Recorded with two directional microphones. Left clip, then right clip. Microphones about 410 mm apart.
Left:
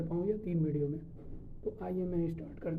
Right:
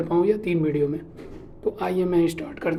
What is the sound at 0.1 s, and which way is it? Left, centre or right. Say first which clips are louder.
Speech: right 15 dB; centre.